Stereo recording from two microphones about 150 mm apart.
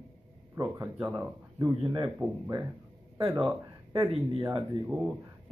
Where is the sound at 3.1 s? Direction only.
25° right (ahead or behind).